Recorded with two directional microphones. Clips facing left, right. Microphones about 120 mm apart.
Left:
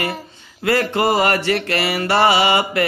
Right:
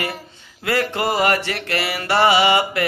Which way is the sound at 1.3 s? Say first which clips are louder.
Left 2 dB; 20° right (ahead or behind).